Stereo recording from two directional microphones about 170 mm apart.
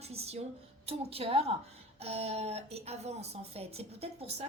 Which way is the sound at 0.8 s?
35° right (ahead or behind).